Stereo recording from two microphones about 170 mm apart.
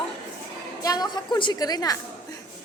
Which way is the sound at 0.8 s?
20° left (ahead or behind).